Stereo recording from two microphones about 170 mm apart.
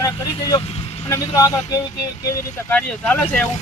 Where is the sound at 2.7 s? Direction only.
10° left (ahead or behind).